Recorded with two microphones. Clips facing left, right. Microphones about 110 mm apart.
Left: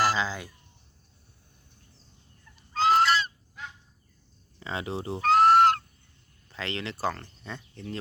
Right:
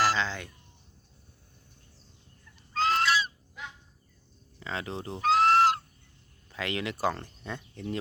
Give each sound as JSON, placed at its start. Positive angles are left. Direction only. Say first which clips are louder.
{"t": 0.0, "sound": "speech", "louder": "left 1 dB", "side_deg": 5}
{"t": 2.7, "sound": "goose", "louder": "left 4 dB", "side_deg": 5}
{"t": 4.6, "sound": "speech", "louder": "left 3 dB", "side_deg": 10}
{"t": 5.2, "sound": "a sound", "louder": "left 3 dB", "side_deg": 0}
{"t": 6.5, "sound": "speech", "louder": "right 2 dB", "side_deg": -10}